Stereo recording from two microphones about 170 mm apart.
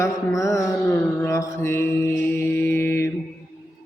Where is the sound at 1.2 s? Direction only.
15° left (ahead or behind).